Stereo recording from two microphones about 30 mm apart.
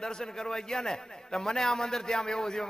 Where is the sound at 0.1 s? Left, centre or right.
Left.